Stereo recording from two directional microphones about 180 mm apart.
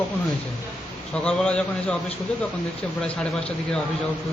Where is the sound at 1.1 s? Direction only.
5° left (ahead or behind).